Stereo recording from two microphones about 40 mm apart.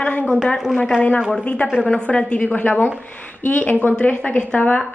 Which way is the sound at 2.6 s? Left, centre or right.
Left.